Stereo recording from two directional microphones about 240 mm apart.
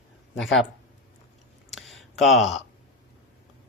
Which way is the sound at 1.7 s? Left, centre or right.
Centre.